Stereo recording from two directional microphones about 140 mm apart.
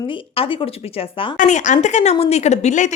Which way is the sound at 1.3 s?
60° left (ahead or behind).